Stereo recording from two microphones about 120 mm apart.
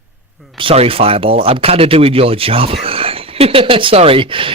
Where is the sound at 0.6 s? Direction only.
50° right (ahead or behind).